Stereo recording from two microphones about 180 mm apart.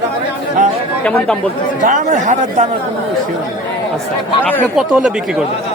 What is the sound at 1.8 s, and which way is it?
Speech, 45° right (ahead or behind).